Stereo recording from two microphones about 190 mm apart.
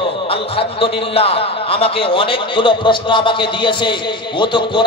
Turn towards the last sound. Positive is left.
turn(degrees=25)  # may be behind; listen again after turning